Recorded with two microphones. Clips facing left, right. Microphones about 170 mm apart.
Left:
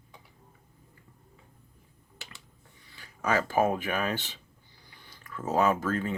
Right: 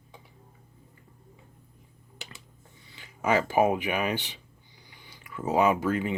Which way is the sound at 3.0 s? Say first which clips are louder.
Right 3 dB; 20° right (ahead or behind).